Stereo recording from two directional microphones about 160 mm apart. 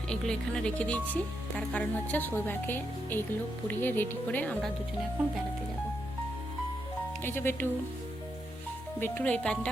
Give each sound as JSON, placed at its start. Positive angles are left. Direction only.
{"t": 0.1, "sound": "speech", "side_deg": 5}
{"t": 7.2, "sound": "speech", "side_deg": 15}
{"t": 9.0, "sound": "speech", "side_deg": 10}